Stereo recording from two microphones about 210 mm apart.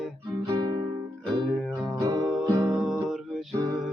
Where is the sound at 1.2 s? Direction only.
Centre (ahead or behind).